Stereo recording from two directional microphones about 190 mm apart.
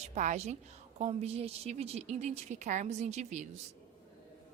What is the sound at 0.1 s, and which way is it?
A woman's voice, 40° right (ahead or behind).